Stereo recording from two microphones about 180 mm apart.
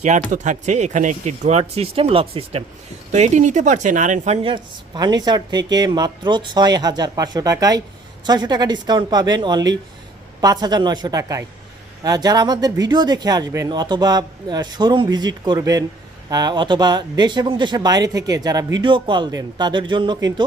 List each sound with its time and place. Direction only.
0.3 s speech: 40° right (ahead or behind)
4.4 s speech: 25° right (ahead or behind)